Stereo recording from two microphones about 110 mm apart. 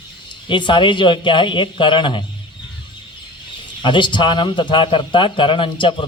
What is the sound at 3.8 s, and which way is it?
Speech, 45° left (ahead or behind).